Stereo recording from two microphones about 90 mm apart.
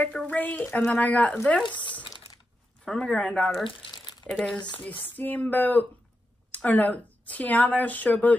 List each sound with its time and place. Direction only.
0.0 s speech: 15° left (ahead or behind)
1.6 s speech: 60° left (ahead or behind)
2.8 s speech: 10° left (ahead or behind)
3.6 s crumpling: 55° left (ahead or behind)
4.3 s speech: 5° left (ahead or behind)
4.7 s speech: 20° left (ahead or behind)